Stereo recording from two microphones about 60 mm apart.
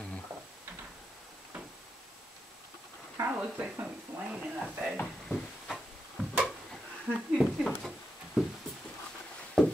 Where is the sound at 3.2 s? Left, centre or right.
Right.